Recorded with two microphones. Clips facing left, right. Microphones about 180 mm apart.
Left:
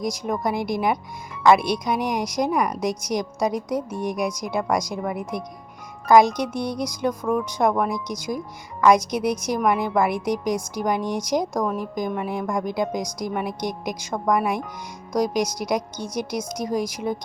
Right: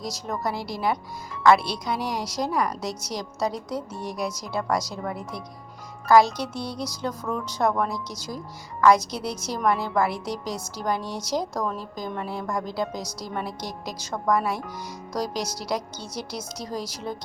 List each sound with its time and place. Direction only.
0.0 s a woman's voice: 15° left (ahead or behind)